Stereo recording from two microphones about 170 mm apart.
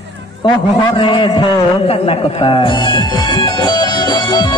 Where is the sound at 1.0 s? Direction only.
30° left (ahead or behind).